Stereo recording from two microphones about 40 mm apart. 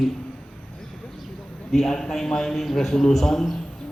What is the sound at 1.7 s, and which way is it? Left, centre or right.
A man's voice, centre.